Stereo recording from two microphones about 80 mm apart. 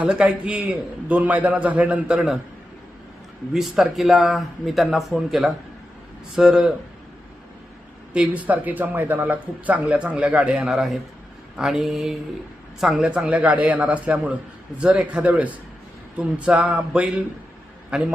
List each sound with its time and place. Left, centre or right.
0.0 s a man's voice: centre
2.1 s a man's voice: centre
3.5 s a man's voice: centre
8.1 s a man's voice: centre